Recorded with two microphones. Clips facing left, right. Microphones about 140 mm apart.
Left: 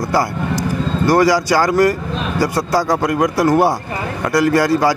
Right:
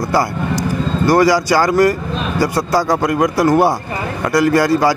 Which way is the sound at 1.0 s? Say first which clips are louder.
Right 1 dB; 20° right (ahead or behind).